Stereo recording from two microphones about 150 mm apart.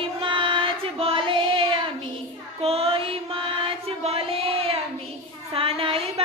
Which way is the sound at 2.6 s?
40° right (ahead or behind).